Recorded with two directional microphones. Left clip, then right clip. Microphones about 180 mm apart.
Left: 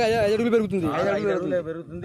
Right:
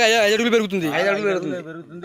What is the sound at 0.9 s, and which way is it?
Speech, 30° right (ahead or behind).